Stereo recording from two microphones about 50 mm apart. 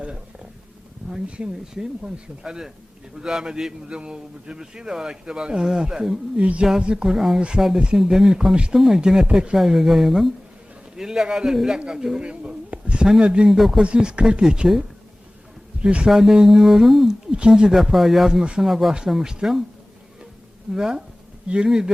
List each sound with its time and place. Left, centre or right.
0.0 s a sound: right
1.1 s a man's voice: centre
9.6 s a man's voice: centre
12.3 s a sound: centre
13.1 s speech: centre
13.5 s speech: centre
13.8 s speech: centre
14.4 s a man's voice: centre
16.0 s a man's voice: centre
17.3 s a man's voice: centre
20.7 s a man's voice: centre